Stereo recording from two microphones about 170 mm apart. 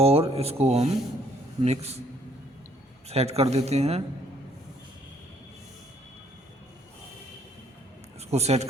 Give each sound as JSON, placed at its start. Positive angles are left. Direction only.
{"t": 0.0, "sound": "speech", "side_deg": -35}
{"t": 3.1, "sound": "speech", "side_deg": -40}
{"t": 8.3, "sound": "speech", "side_deg": -40}